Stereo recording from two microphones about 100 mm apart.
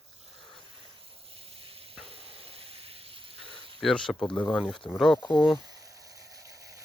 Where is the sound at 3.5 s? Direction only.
5° left (ahead or behind).